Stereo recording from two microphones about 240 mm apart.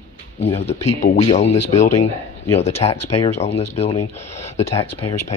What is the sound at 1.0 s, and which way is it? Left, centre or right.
Speech, left.